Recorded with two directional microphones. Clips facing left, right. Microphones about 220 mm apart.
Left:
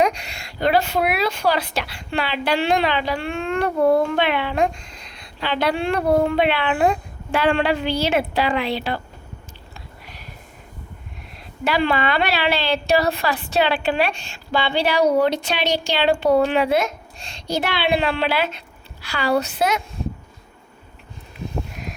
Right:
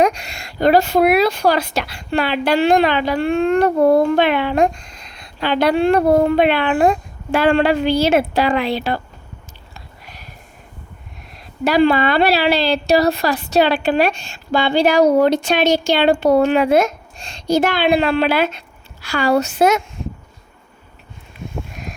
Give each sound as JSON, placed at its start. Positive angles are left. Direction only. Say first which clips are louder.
{"t": 0.0, "sound": "speech", "louder": "right 4 dB", "side_deg": -45}
{"t": 11.6, "sound": "speech", "louder": "right 6 dB", "side_deg": -40}